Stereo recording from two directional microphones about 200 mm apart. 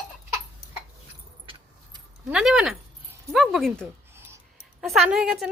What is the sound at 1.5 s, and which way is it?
Keys jangling, 25° right (ahead or behind).